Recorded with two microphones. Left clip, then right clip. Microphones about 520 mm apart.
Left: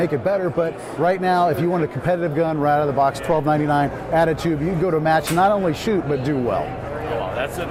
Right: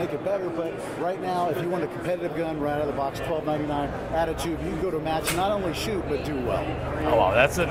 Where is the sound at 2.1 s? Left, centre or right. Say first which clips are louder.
Left 9 dB; left.